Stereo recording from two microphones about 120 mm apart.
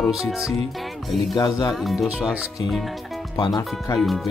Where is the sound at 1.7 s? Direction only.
Centre (ahead or behind).